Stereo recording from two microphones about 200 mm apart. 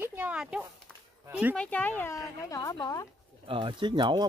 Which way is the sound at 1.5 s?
5° left (ahead or behind).